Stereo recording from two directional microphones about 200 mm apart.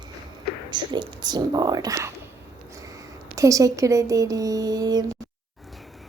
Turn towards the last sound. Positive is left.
turn(degrees=-20)  # may be behind; listen again after turning